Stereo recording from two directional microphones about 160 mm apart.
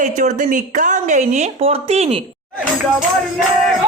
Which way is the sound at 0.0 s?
50° right (ahead or behind).